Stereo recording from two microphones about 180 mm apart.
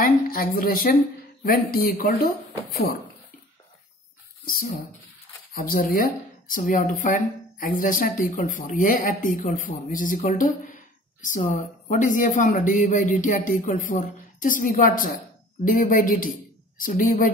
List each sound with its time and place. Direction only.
0.0 s a woman's voice: 50° left (ahead or behind)
5.5 s speech: 55° left (ahead or behind)